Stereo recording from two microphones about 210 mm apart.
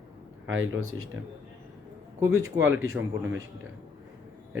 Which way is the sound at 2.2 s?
15° right (ahead or behind).